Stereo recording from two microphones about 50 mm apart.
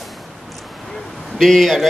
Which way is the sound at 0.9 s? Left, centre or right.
Centre.